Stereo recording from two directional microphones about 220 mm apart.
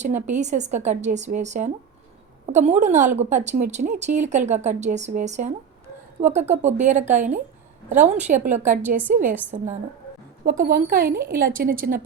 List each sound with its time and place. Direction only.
0.0 s speech: 35° right (ahead or behind)
6.5 s speech: 30° right (ahead or behind)